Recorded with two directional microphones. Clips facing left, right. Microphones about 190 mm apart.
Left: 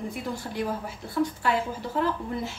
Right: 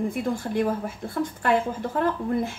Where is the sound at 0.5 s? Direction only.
50° right (ahead or behind).